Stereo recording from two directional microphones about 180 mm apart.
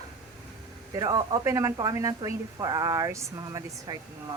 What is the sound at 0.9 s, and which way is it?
Speech, 20° right (ahead or behind).